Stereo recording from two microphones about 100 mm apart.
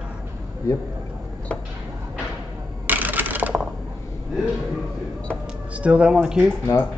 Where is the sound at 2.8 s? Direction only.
20° right (ahead or behind).